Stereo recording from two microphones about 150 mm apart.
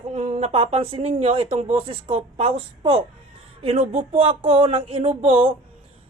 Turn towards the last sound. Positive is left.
turn(degrees=-35)  # may be behind; listen again after turning